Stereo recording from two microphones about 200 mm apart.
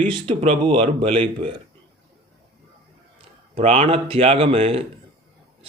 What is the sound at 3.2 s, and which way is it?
A man's voice, 30° right (ahead or behind).